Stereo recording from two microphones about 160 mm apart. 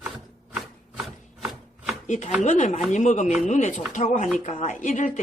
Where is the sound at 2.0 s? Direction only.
45° left (ahead or behind).